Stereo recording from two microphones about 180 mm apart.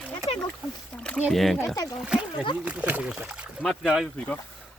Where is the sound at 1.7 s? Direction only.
20° left (ahead or behind).